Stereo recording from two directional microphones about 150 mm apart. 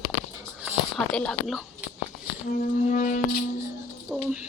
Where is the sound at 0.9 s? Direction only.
5° left (ahead or behind).